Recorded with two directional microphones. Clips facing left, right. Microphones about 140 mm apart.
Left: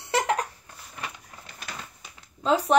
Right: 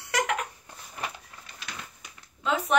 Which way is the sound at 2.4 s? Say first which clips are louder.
Left 5 dB; 35° left (ahead or behind).